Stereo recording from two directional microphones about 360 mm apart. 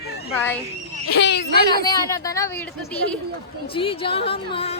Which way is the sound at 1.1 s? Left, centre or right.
Left.